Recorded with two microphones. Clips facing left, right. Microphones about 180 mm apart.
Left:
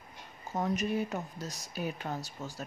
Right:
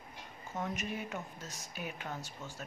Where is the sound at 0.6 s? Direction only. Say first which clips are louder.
Left 7 dB; 35° left (ahead or behind).